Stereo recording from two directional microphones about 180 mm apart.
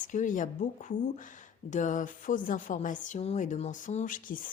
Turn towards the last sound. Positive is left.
turn(degrees=50)  # may be behind; listen again after turning